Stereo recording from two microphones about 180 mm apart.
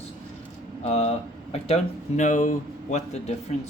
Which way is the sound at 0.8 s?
35° left (ahead or behind).